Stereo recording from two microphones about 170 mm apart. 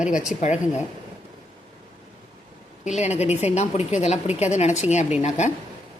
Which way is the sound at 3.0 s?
40° left (ahead or behind).